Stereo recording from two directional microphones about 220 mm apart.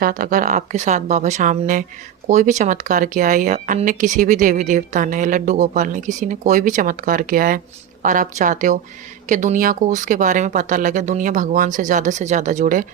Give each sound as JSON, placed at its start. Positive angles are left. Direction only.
{"t": 0.0, "sound": "speech", "side_deg": -40}